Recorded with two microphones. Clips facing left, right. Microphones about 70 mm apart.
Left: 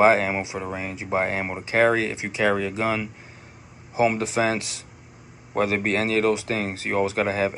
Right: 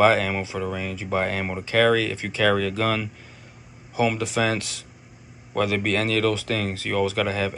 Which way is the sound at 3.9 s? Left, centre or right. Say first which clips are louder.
Left 2 dB; left.